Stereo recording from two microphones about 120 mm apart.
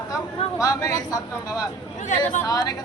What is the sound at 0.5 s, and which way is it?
Speech, 30° left (ahead or behind).